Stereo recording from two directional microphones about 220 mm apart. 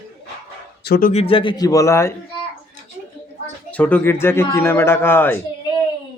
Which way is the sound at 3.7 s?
5° left (ahead or behind).